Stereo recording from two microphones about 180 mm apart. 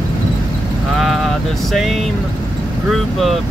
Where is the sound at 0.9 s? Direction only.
Centre (ahead or behind).